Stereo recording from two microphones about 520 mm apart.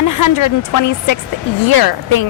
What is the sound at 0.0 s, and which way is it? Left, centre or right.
A woman's voice, left.